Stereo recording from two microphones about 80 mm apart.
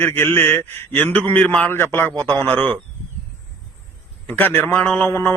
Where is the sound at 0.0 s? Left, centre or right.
Left.